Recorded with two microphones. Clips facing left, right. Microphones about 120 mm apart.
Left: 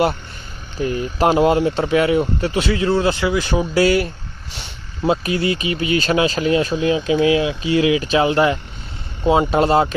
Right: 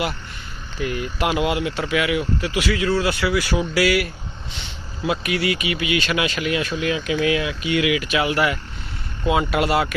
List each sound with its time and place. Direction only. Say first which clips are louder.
0.8 s speech: left 5 dB; 30° left (ahead or behind)